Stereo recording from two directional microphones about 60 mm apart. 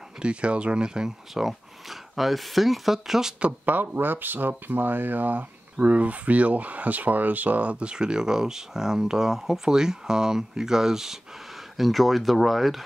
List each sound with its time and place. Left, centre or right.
0.2 s speech: centre
3.3 s speech: right; by 12.8 s centre